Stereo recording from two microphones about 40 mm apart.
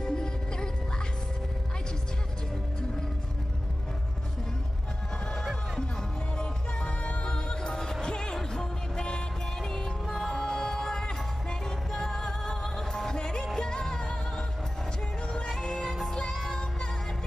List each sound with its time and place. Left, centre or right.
0.0 s music: centre
5.3 s music: centre
6.3 s music: left
16.4 s music: centre